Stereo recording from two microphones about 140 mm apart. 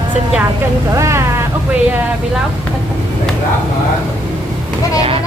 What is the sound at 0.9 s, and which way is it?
Speech, 20° right (ahead or behind).